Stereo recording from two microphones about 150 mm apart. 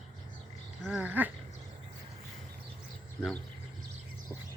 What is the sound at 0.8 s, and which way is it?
Dog, 5° right (ahead or behind).